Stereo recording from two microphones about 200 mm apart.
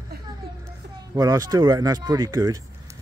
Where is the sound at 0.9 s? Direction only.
15° right (ahead or behind).